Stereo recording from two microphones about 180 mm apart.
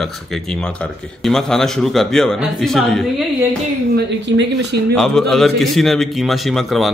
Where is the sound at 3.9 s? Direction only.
70° right (ahead or behind).